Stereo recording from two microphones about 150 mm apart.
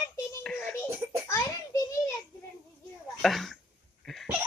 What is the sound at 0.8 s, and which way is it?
Baby laughter, 15° right (ahead or behind).